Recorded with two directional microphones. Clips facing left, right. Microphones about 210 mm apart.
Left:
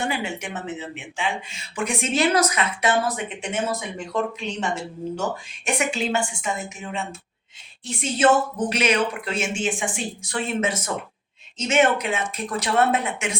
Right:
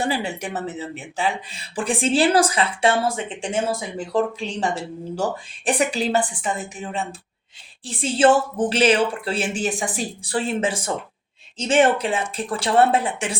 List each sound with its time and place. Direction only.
0.0 s speech: 35° right (ahead or behind)